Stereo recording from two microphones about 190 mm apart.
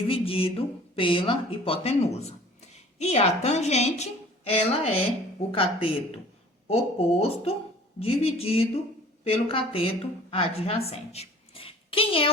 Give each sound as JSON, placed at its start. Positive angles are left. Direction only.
{"t": 0.1, "sound": "a woman's voice", "side_deg": 30}